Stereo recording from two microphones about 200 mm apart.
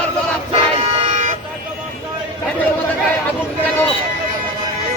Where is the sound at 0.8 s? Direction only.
30° right (ahead or behind).